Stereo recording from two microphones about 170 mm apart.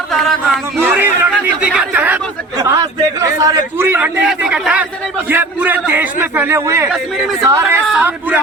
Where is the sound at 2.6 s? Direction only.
20° right (ahead or behind).